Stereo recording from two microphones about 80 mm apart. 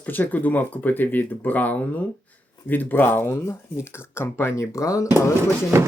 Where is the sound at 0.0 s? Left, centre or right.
Left.